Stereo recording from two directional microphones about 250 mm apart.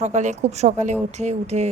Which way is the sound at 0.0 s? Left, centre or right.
Right.